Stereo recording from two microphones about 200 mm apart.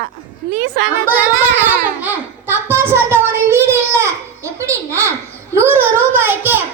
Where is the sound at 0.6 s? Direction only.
65° right (ahead or behind).